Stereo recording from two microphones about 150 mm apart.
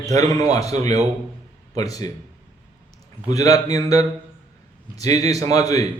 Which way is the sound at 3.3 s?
25° left (ahead or behind).